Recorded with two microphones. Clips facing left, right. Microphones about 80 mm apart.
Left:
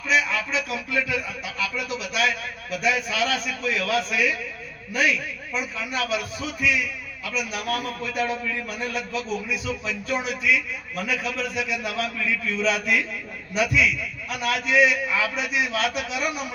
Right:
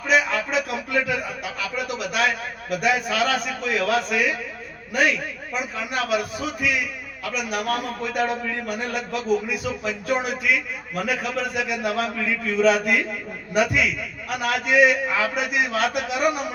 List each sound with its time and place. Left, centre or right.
0.1 s a sound: right
1.6 s a man's voice: right
12.0 s a man's voice: right
12.5 s a man's voice: right